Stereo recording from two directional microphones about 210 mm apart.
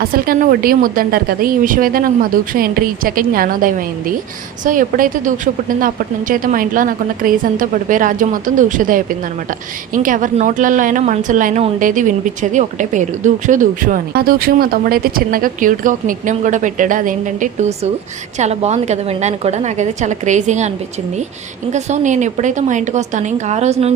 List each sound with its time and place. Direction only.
0.0 s a woman's voice: 45° right (ahead or behind)
21.7 s a woman's voice: 35° right (ahead or behind)